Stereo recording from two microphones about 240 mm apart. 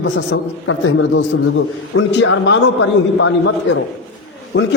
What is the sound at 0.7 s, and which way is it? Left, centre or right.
A man's voice, left.